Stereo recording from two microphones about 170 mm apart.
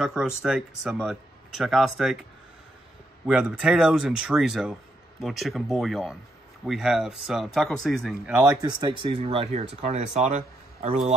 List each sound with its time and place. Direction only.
0.0 s speech: centre (ahead or behind)
3.3 s speech: 5° right (ahead or behind)
8.5 s speech: 25° right (ahead or behind)